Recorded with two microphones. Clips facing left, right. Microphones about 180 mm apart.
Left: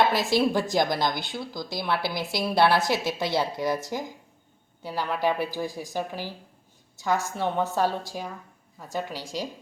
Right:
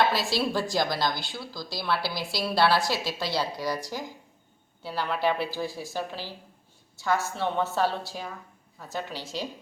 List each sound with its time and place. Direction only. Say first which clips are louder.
0.0 s a woman's voice: left 3 dB; 20° left (ahead or behind)